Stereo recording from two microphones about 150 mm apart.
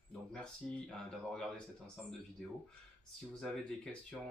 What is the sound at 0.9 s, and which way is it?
Speech, 5° left (ahead or behind).